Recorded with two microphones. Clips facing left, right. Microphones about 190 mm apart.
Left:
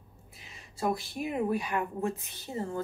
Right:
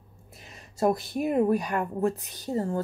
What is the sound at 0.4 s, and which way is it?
Speech, 45° right (ahead or behind).